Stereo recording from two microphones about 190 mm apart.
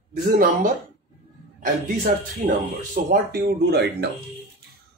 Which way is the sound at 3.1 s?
55° right (ahead or behind).